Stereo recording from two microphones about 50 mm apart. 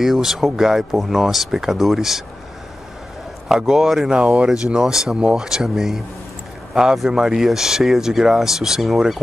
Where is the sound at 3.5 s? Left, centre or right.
Centre.